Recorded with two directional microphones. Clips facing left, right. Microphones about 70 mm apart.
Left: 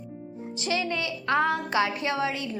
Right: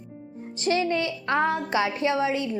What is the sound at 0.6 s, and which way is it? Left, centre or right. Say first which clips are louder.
A woman's voice: right 5 dB; right.